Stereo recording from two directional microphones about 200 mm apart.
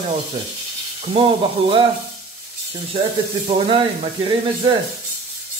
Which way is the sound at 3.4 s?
30° right (ahead or behind).